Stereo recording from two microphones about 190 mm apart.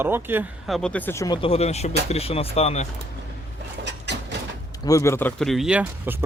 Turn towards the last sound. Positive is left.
turn(degrees=-10)  # may be behind; listen again after turning